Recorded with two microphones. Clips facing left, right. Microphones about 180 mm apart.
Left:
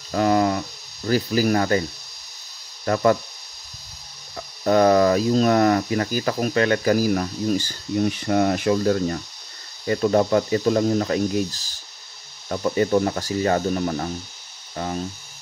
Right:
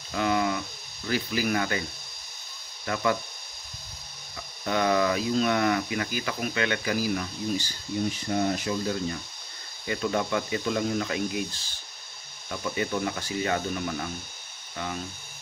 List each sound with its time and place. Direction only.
0.1 s hum: 40° left (ahead or behind)
1.0 s speech: 40° left (ahead or behind)
4.4 s speech: 40° left (ahead or behind)
8.0 s speech: 70° left (ahead or behind)
9.8 s speech: 40° left (ahead or behind)